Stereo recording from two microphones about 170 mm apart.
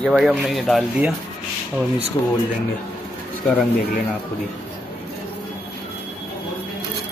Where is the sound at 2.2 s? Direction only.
25° left (ahead or behind).